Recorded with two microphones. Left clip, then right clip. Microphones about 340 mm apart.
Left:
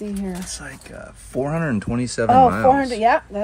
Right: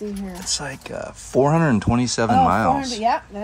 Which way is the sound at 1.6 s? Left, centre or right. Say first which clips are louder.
Right 4 dB; centre.